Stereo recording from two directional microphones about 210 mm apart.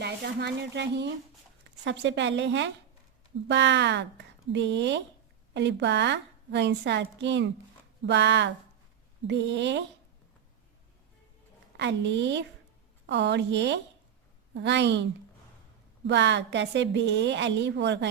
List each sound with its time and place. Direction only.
0.0 s a woman's voice: 55° right (ahead or behind)
11.8 s a woman's voice: 55° right (ahead or behind)
16.0 s a woman's voice: 55° right (ahead or behind)